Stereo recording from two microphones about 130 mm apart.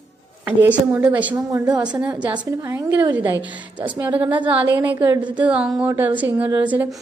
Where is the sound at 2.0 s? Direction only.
10° right (ahead or behind).